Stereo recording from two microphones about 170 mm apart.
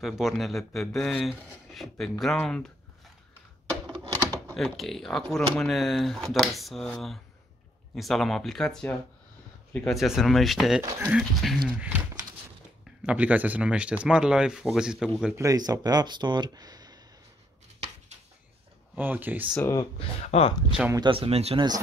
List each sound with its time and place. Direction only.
0.0 s speech: centre (ahead or behind)
4.5 s speech: centre (ahead or behind)
10.8 s speech: 20° right (ahead or behind)
11.1 s speech: centre (ahead or behind)
15.3 s speech: 20° right (ahead or behind)
18.9 s speech: 10° right (ahead or behind)
19.5 s speech: 15° left (ahead or behind)
20.0 s speech: 35° left (ahead or behind)
20.9 s speech: 30° right (ahead or behind)